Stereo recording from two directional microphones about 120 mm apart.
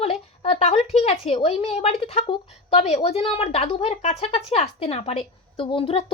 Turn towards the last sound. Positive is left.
turn(degrees=50)  # may be behind; listen again after turning